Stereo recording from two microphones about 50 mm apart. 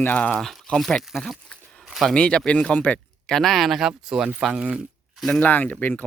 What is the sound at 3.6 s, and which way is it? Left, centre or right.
Speech, centre.